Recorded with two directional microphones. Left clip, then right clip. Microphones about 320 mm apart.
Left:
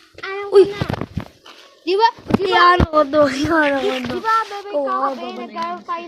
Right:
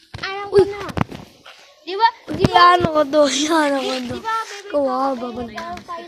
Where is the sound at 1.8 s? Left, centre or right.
Left.